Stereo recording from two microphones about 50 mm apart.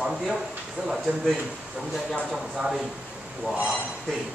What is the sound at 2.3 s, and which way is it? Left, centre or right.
Speech, centre.